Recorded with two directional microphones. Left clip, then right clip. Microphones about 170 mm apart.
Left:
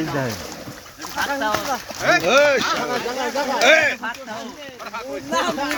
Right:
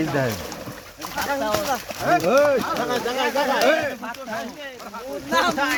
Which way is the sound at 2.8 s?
15° right (ahead or behind).